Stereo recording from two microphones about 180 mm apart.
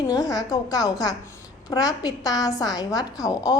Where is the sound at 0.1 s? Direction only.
20° left (ahead or behind).